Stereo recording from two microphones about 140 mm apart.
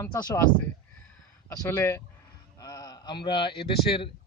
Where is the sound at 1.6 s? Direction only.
20° left (ahead or behind); by 4.1 s 40° left (ahead or behind).